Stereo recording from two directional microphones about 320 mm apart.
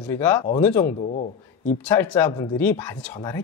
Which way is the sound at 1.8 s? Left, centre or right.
Centre.